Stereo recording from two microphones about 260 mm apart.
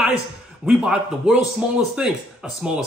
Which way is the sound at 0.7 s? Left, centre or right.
Centre.